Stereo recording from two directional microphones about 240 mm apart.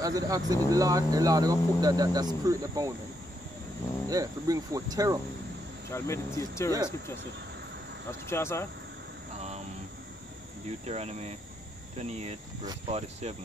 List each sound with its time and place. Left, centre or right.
0.0 s speech: centre
4.1 s speech: centre
5.9 s speech: centre
8.3 s speech: centre
10.9 s speech: right